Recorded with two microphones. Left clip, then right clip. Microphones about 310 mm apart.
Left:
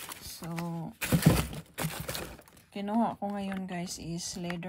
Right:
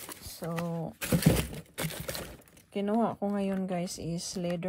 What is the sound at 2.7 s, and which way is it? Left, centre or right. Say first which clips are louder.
Speech: right 1 dB; right.